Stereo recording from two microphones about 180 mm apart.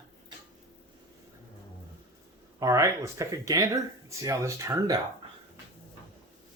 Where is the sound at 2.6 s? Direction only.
15° right (ahead or behind).